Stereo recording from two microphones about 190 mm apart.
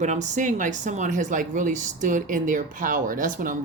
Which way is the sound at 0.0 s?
40° right (ahead or behind).